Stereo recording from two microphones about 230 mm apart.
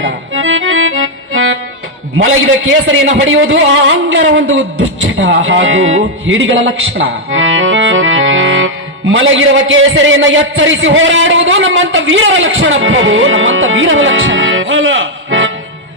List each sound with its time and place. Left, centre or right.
0.0 s accordion: right
2.1 s a sound: right
5.1 s a man's voice: right